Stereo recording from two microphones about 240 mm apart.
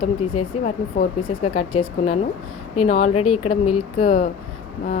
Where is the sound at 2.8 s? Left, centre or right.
Left.